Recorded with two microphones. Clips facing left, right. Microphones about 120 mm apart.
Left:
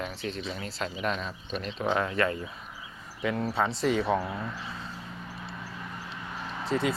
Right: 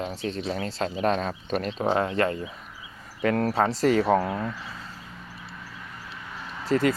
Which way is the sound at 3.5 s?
40° right (ahead or behind).